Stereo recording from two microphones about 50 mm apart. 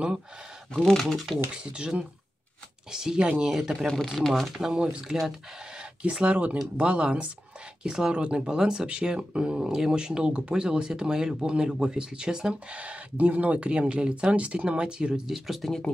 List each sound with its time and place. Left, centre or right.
0.7 s speech: centre
1.5 s speech: centre
3.8 s speech: centre
6.0 s speech: right
12.7 s speech: right; by 15.7 s centre